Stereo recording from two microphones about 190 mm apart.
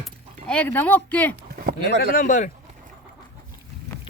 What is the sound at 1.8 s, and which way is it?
Speech, 45° left (ahead or behind).